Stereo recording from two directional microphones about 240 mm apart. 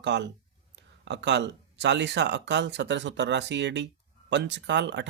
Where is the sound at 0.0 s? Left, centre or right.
Right.